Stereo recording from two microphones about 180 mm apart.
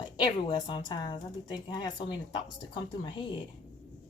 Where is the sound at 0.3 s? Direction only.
25° left (ahead or behind).